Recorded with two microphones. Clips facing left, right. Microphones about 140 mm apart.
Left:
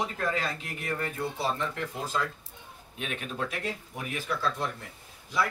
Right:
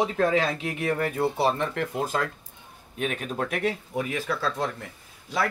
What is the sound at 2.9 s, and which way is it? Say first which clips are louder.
Speech: right 7 dB; 45° right (ahead or behind).